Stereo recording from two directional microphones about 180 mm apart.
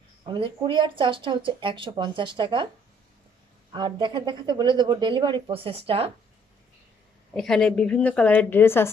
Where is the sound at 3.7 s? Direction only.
25° right (ahead or behind).